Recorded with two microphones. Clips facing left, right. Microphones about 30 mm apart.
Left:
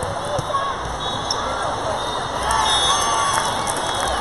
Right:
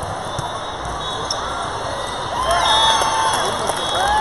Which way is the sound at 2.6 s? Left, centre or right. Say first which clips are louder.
Right 5 dB; centre.